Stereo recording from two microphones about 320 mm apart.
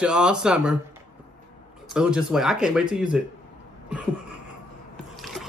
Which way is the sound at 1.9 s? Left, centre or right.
Centre.